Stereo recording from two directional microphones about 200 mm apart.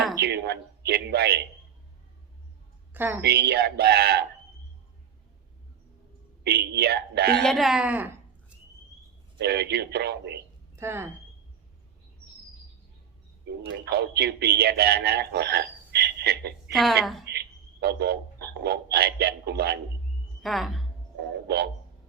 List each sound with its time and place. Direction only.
0.2 s a man's voice: 55° right (ahead or behind)
2.9 s a woman's voice: 10° right (ahead or behind)
3.2 s speech: 55° right (ahead or behind)
6.4 s speech: 55° right (ahead or behind)
7.4 s speech: centre (ahead or behind)
9.4 s speech: 55° right (ahead or behind)
10.8 s speech: 15° right (ahead or behind)
13.7 s speech: 55° right (ahead or behind)
16.7 s speech: centre (ahead or behind)
17.2 s a man's voice: 55° right (ahead or behind)
20.4 s speech: centre (ahead or behind)
21.2 s speech: 55° right (ahead or behind)